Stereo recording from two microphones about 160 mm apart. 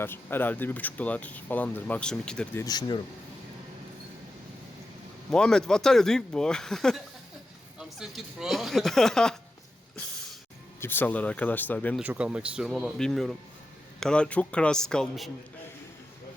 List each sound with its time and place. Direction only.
0.0 s speech: 15° left (ahead or behind)
2.6 s speech: 25° left (ahead or behind)
5.3 s speech: 5° left (ahead or behind)
10.8 s speech: 15° left (ahead or behind)
11.9 s speech: 10° right (ahead or behind)